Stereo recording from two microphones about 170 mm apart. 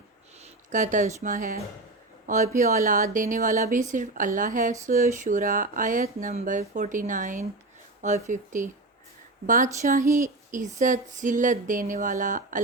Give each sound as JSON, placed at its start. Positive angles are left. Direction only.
{"t": 0.7, "sound": "speech", "side_deg": -50}
{"t": 9.8, "sound": "speech", "side_deg": -55}